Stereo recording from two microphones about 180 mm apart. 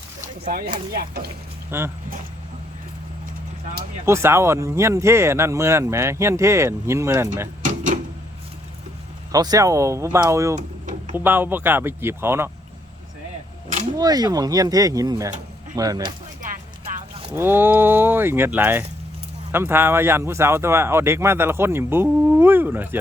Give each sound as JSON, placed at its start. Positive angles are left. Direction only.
{"t": 0.4, "sound": "speech", "side_deg": -50}
{"t": 1.7, "sound": "speech", "side_deg": -15}
{"t": 4.0, "sound": "speech", "side_deg": -15}
{"t": 7.6, "sound": "a sound", "side_deg": -45}
{"t": 9.3, "sound": "speech", "side_deg": -20}
{"t": 14.0, "sound": "speech", "side_deg": -20}
{"t": 16.4, "sound": "music", "side_deg": -45}
{"t": 17.3, "sound": "speech", "side_deg": -10}